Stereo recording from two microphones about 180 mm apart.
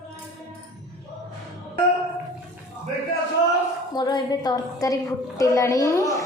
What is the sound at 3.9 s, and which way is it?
A woman's voice, 25° left (ahead or behind).